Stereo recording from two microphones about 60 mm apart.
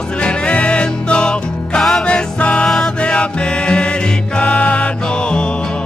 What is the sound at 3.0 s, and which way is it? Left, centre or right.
Music, centre.